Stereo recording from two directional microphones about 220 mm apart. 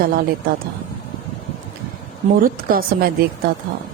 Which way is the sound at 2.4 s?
40° right (ahead or behind).